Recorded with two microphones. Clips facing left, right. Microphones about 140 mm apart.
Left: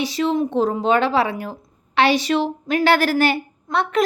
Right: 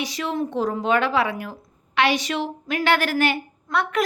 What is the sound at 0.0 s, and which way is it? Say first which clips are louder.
A woman's voice: left 6 dB; 30° left (ahead or behind).